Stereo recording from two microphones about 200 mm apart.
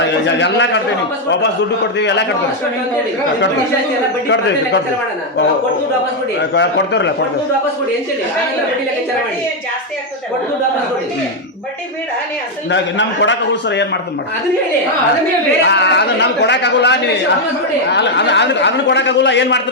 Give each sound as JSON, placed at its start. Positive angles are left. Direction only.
{"t": 0.0, "sound": "a man's voice", "side_deg": 60}
{"t": 2.0, "sound": "a man's voice", "side_deg": 60}
{"t": 4.3, "sound": "a man's voice", "side_deg": 60}
{"t": 6.5, "sound": "a man's voice", "side_deg": 60}
{"t": 12.7, "sound": "a man's voice", "side_deg": 65}
{"t": 15.6, "sound": "a man's voice", "side_deg": 60}